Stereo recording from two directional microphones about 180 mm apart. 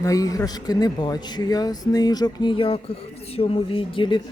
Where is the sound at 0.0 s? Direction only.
20° left (ahead or behind).